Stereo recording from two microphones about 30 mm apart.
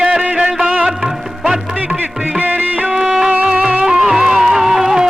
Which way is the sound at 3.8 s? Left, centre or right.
Centre.